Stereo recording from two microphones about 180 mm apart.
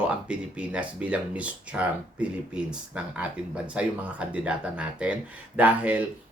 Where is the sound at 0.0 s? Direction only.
5° right (ahead or behind).